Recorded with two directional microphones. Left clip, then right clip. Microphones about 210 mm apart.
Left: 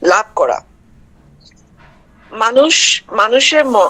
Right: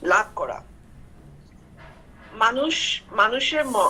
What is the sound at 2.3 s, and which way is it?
A woman's voice, 60° left (ahead or behind).